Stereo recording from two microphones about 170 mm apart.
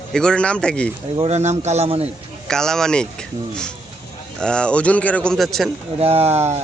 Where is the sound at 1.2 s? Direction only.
40° right (ahead or behind).